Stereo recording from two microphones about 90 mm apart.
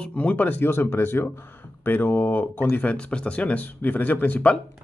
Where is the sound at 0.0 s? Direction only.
15° left (ahead or behind).